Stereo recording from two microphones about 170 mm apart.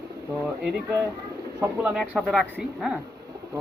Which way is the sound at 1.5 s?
15° right (ahead or behind).